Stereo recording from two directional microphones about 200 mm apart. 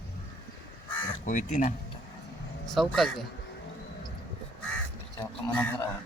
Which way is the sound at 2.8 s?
Centre (ahead or behind).